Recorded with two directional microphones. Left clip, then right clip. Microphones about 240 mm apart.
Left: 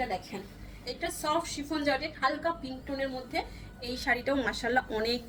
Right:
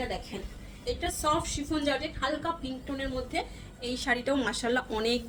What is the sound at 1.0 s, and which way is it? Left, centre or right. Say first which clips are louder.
Speech: right 1 dB; right.